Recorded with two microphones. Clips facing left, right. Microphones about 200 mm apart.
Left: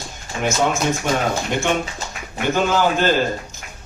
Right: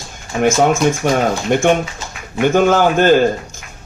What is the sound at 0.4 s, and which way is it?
A man's voice, 50° right (ahead or behind).